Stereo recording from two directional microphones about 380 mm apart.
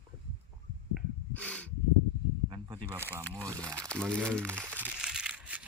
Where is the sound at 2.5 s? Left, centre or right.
Centre.